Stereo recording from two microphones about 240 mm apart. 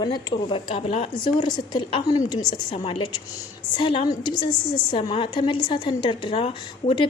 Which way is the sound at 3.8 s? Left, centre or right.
Left.